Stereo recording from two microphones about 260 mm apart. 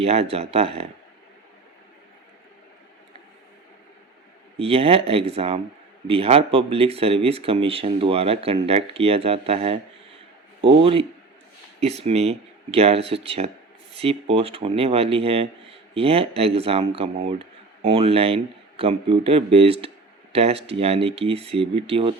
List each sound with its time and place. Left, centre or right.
0.0 s speech: right
4.5 s speech: right